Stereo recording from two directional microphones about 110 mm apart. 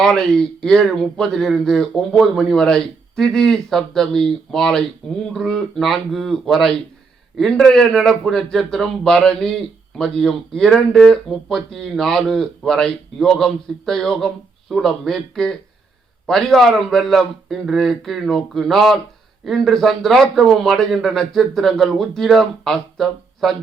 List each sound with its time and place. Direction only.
0.0 s speech: 5° left (ahead or behind)